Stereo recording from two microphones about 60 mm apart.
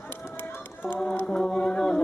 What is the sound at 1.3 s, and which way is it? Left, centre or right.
Music, centre.